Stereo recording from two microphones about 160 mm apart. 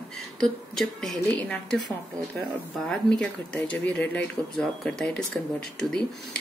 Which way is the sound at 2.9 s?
5° left (ahead or behind).